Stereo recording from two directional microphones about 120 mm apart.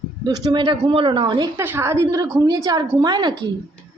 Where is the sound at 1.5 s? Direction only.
20° right (ahead or behind); by 3.3 s 35° right (ahead or behind).